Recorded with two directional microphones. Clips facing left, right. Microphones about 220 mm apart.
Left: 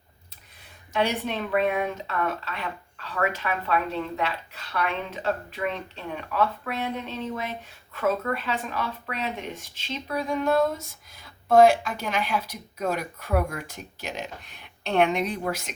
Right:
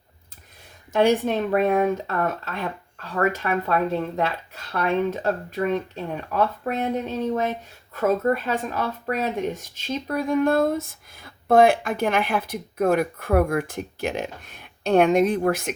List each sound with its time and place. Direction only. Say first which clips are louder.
0.9 s speech: right 7 dB; 45° right (ahead or behind)